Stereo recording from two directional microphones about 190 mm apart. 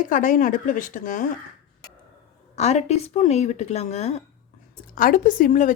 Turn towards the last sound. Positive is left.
turn(degrees=45)  # may be behind; listen again after turning